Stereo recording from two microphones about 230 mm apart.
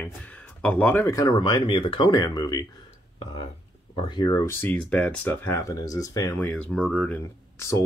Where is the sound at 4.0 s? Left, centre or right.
Centre.